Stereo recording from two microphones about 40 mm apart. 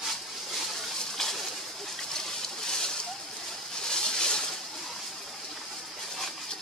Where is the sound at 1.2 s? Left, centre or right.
Centre.